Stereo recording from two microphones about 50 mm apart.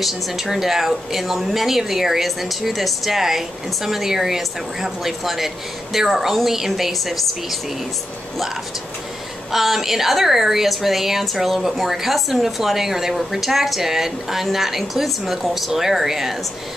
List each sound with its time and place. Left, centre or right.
0.0 s a woman's voice: centre
9.5 s a woman's voice: centre